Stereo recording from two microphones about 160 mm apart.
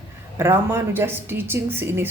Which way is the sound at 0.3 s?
15° right (ahead or behind).